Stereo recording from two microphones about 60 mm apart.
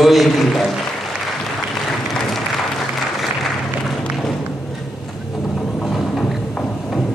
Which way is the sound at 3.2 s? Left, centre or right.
Centre.